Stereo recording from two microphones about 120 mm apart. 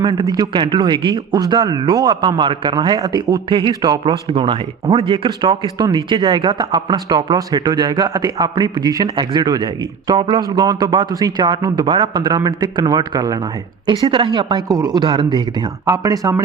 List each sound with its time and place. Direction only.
0.0 s a man's voice: 40° right (ahead or behind)
10.5 s a man's voice: 30° right (ahead or behind)
15.9 s speech: 30° right (ahead or behind)